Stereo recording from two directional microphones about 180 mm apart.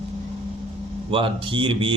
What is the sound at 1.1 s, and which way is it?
Speech, 30° right (ahead or behind).